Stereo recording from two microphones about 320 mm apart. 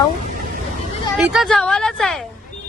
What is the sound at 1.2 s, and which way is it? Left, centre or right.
Speech, centre.